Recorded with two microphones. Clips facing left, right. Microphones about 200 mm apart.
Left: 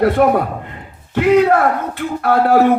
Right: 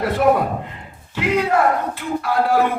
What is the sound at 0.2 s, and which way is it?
A man's voice, 55° left (ahead or behind).